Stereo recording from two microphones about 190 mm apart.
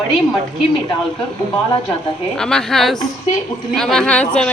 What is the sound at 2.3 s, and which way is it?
A woman's voice, 5° left (ahead or behind).